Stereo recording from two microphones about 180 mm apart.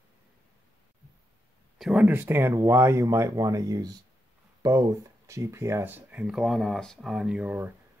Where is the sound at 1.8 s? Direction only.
5° right (ahead or behind).